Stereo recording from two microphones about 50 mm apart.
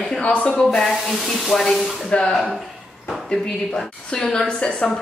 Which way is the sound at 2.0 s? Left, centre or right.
Centre.